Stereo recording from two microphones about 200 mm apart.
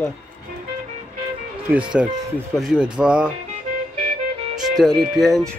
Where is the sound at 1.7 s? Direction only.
5° right (ahead or behind).